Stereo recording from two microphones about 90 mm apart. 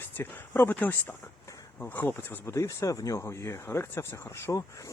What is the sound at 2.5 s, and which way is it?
Speech, 35° left (ahead or behind).